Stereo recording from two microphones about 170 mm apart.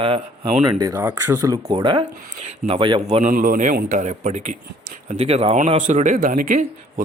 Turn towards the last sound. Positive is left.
turn(degrees=-50)  # may be behind; listen again after turning